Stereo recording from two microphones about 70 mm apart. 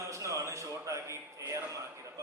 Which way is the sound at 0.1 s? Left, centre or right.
Right.